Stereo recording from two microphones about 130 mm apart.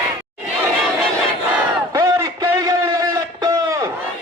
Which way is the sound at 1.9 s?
25° right (ahead or behind).